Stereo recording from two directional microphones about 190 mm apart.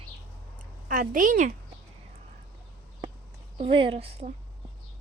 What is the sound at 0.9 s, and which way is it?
Speech, 45° right (ahead or behind).